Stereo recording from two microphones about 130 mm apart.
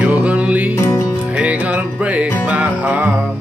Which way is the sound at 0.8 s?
20° left (ahead or behind).